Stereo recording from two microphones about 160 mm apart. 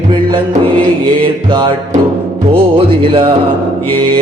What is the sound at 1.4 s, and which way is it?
Music, 30° right (ahead or behind).